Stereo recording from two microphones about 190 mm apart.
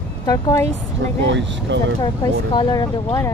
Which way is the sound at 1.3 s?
70° right (ahead or behind).